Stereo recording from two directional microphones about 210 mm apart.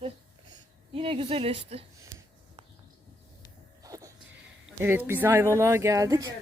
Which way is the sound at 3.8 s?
15° right (ahead or behind).